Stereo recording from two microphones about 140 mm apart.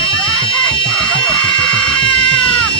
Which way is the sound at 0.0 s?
40° left (ahead or behind).